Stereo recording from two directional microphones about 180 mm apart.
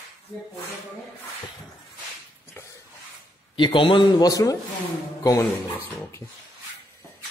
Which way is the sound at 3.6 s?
25° left (ahead or behind).